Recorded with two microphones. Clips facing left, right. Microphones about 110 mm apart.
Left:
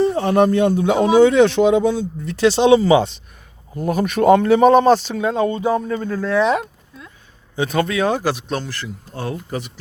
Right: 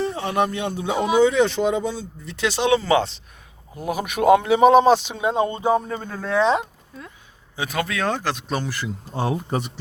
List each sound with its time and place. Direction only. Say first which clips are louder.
0.0 s speech: left 7 dB; 40° left (ahead or behind)
0.8 s a man's voice: left 3 dB; 65° left (ahead or behind)
2.3 s speech: left 7 dB; 35° left (ahead or behind)
2.8 s speech: left 5 dB; 5° left (ahead or behind)
3.8 s speech: left 5 dB; 5° right (ahead or behind)
5.1 s speech: left 3 dB; 25° right (ahead or behind)
7.5 s speech: left 6 dB; 5° right (ahead or behind)
8.4 s speech: left 1 dB; 10° right (ahead or behind)